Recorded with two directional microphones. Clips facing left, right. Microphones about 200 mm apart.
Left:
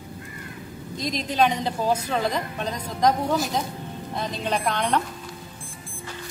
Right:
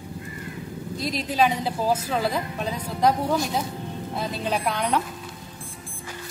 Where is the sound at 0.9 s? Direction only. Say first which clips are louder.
Even; 5° right (ahead or behind).